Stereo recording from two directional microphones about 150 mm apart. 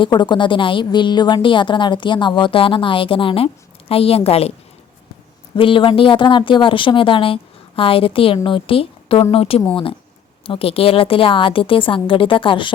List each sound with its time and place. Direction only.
0.0 s a woman's voice: 30° left (ahead or behind)
5.5 s a woman's voice: 35° left (ahead or behind)